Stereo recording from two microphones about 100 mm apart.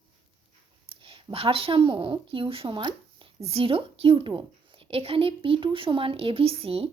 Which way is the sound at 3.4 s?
85° right.